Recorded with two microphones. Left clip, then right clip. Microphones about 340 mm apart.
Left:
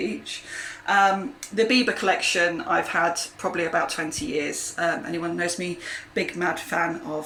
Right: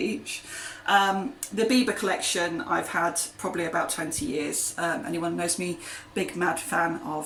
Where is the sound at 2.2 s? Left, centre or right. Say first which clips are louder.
Left 5 dB; centre.